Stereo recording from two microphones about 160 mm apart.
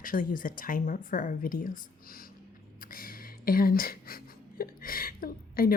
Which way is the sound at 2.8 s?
65° left (ahead or behind).